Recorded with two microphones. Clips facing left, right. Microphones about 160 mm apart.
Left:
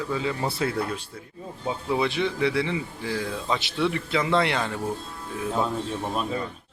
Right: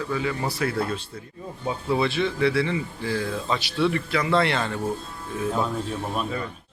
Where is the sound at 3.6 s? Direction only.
20° left (ahead or behind).